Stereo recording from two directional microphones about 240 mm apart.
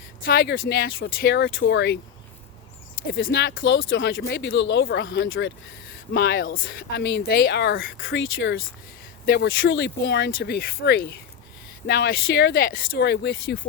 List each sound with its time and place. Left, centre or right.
0.3 s speech: left
3.1 s speech: left